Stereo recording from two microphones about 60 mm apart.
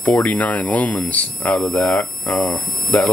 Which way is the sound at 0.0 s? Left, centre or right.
Left.